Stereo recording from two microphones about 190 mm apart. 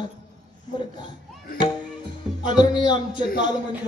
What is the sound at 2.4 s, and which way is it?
Speech, 25° left (ahead or behind).